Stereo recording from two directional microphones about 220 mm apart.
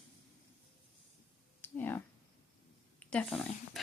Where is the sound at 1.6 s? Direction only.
10° left (ahead or behind).